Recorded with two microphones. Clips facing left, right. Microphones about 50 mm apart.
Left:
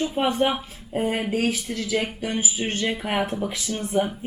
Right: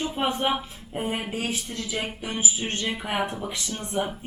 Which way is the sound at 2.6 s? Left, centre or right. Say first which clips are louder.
Left 4 dB; centre.